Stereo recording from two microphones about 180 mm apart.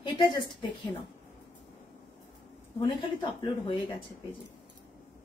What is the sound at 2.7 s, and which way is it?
A woman's voice, 30° left (ahead or behind).